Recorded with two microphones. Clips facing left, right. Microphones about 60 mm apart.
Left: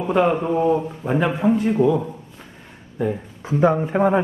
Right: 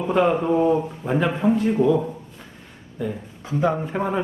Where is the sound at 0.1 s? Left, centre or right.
Centre.